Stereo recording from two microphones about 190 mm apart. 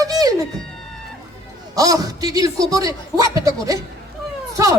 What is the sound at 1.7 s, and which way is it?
A woman's voice, 20° right (ahead or behind).